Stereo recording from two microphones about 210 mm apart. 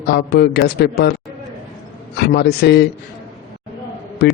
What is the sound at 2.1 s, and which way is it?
Speech, 50° left (ahead or behind).